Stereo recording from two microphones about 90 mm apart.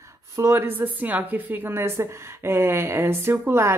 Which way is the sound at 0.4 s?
25° right (ahead or behind).